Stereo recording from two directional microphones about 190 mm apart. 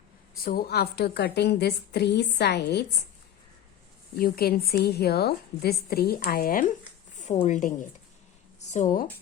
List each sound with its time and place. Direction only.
0.4 s a woman's voice: 55° left (ahead or behind)
4.1 s a woman's voice: 55° left (ahead or behind)